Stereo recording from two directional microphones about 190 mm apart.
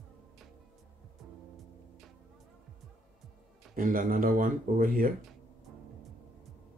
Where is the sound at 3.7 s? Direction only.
45° right (ahead or behind).